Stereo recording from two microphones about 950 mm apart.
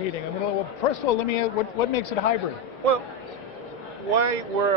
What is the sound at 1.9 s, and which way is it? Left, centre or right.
Speech, left.